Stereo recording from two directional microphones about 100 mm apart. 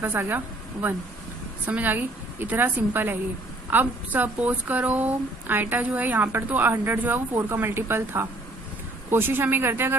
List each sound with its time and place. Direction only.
0.0 s a woman's voice: 20° right (ahead or behind)